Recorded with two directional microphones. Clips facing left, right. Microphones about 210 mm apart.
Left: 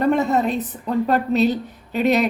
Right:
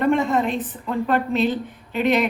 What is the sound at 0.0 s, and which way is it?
A woman's voice, 40° left (ahead or behind).